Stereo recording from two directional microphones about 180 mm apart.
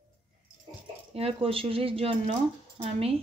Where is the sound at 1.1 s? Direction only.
30° right (ahead or behind).